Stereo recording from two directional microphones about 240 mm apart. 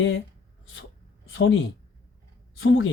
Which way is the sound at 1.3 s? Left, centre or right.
Left.